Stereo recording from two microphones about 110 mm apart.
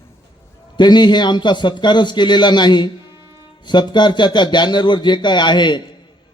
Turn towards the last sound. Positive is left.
turn(degrees=45)  # may be behind; listen again after turning